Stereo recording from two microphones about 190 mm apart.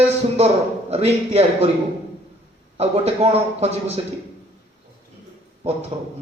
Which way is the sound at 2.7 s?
35° right (ahead or behind).